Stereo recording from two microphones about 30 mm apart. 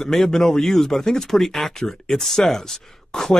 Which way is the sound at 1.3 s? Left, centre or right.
Centre.